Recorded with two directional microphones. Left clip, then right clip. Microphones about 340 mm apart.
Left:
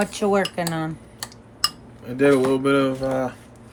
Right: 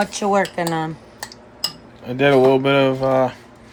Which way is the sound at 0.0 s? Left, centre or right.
Centre.